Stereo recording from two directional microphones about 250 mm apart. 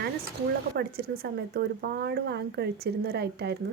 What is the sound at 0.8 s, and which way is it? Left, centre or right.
Speech, right.